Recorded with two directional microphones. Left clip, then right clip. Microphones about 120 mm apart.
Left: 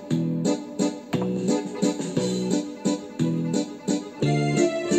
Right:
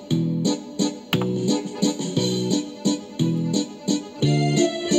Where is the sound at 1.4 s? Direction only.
45° right (ahead or behind).